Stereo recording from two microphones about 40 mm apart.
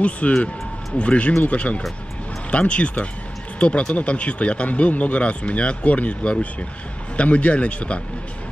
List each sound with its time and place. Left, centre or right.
0.2 s speech: left